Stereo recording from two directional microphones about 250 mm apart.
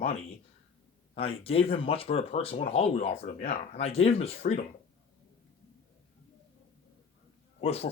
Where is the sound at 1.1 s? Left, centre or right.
Left.